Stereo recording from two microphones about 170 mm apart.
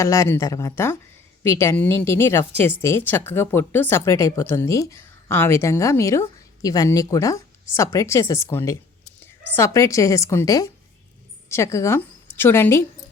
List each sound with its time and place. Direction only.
0.0 s a woman's voice: 15° left (ahead or behind)